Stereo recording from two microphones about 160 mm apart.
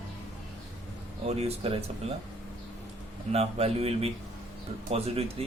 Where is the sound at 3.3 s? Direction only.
40° right (ahead or behind).